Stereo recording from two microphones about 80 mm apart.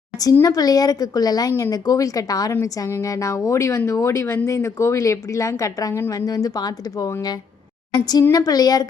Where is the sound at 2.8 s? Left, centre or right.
Left.